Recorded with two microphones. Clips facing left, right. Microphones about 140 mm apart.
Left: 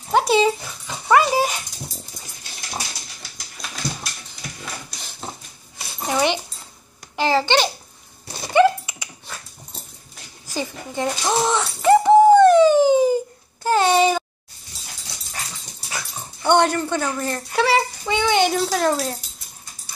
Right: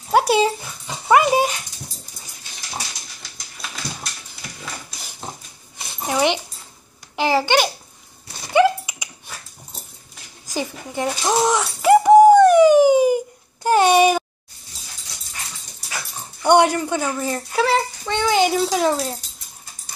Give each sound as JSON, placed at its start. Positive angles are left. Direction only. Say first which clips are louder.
{"t": 0.3, "sound": "dog", "louder": "even", "side_deg": 0}
{"t": 0.8, "sound": "dog", "louder": "right 1 dB", "side_deg": -15}
{"t": 6.1, "sound": "dog", "louder": "right 1 dB", "side_deg": -15}
{"t": 7.2, "sound": "a sound", "louder": "right 1 dB", "side_deg": -10}
{"t": 10.4, "sound": "a sound", "louder": "right 1 dB", "side_deg": -15}
{"t": 16.4, "sound": "a child's voice", "louder": "right 2 dB", "side_deg": -10}